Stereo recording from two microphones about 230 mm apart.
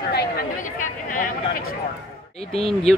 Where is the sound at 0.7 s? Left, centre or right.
Left.